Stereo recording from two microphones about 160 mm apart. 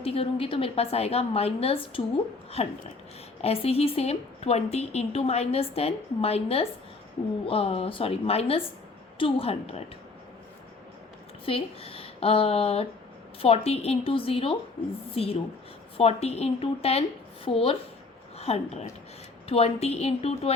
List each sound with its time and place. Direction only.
0.0 s a woman's voice: 35° left (ahead or behind)
11.4 s a woman's voice: 35° left (ahead or behind)
18.3 s a woman's voice: 40° left (ahead or behind)